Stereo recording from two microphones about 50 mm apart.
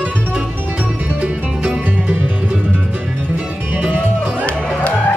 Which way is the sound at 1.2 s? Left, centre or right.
Centre.